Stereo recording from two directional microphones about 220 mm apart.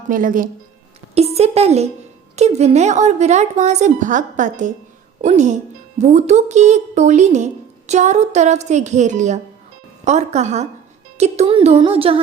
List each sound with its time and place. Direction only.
0.1 s a woman's voice: 35° right (ahead or behind)